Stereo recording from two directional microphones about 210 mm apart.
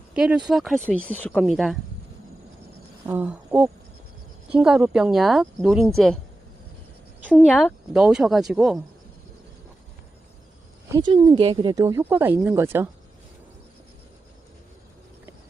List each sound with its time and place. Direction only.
0.1 s a woman's voice: 5° right (ahead or behind)
3.1 s a woman's voice: 10° right (ahead or behind)
7.3 s a woman's voice: 5° left (ahead or behind)
10.9 s speech: 20° right (ahead or behind)